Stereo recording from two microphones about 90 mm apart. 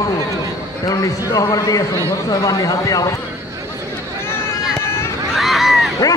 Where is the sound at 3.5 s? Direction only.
35° right (ahead or behind).